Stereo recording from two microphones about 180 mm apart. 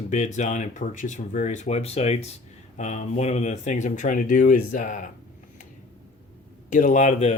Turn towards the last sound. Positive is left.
turn(degrees=40)  # may be behind; listen again after turning